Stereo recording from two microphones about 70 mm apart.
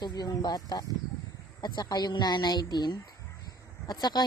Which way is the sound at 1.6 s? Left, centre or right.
Left.